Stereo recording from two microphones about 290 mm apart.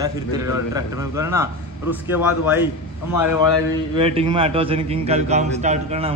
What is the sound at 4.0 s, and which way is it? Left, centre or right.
A man's voice, centre.